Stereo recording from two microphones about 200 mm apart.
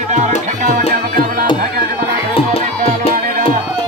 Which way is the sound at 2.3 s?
30° left (ahead or behind).